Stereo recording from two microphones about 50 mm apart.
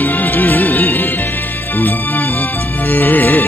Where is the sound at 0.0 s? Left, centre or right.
Left.